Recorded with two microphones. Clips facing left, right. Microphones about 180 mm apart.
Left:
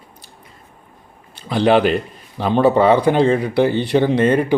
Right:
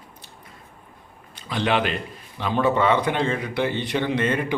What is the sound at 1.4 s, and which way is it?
Speech, 35° left (ahead or behind).